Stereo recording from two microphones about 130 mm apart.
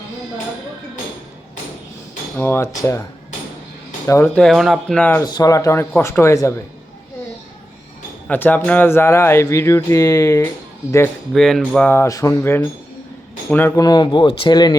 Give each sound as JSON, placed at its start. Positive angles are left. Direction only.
{"t": 2.4, "sound": "speech", "side_deg": 20}
{"t": 4.0, "sound": "speech", "side_deg": 20}
{"t": 4.4, "sound": "speech", "side_deg": 0}
{"t": 4.9, "sound": "speech", "side_deg": 15}
{"t": 5.2, "sound": "speech", "side_deg": 30}
{"t": 8.3, "sound": "speech", "side_deg": 15}
{"t": 11.3, "sound": "speech", "side_deg": 0}
{"t": 11.9, "sound": "speech", "side_deg": 20}
{"t": 13.7, "sound": "speech", "side_deg": 35}